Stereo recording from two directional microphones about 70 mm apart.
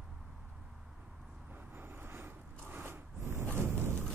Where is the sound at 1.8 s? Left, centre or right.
Right.